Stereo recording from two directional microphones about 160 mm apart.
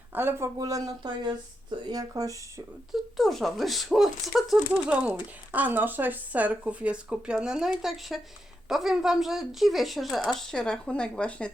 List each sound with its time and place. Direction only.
0.1 s speech: 15° right (ahead or behind)
2.9 s speech: centre (ahead or behind)